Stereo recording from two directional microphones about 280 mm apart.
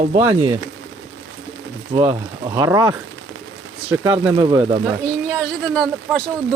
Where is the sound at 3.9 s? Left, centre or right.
Centre.